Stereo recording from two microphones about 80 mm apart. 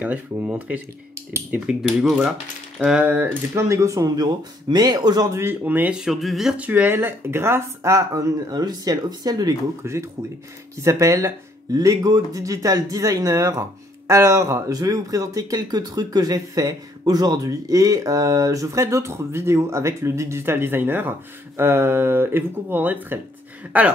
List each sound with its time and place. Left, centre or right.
0.0 s speech: centre
1.7 s speech: centre
3.0 s speech: right
5.3 s speech: right
5.6 s speech: right
5.9 s speech: centre
6.5 s speech: right
7.9 s speech: right
10.8 s speech: right; by 23.9 s centre